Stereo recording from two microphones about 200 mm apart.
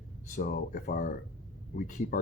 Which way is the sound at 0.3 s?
45° left (ahead or behind).